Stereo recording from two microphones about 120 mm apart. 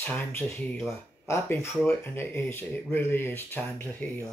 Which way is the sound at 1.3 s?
20° left (ahead or behind).